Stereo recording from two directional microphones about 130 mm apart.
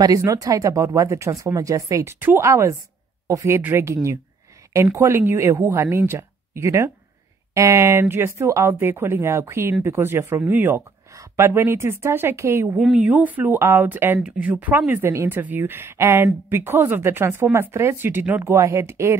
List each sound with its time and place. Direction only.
0.0 s speech: 25° right (ahead or behind)
12.7 s speech: 5° right (ahead or behind); by 19.1 s 20° right (ahead or behind)